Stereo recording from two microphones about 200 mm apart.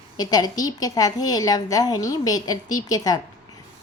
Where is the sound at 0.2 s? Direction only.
20° left (ahead or behind).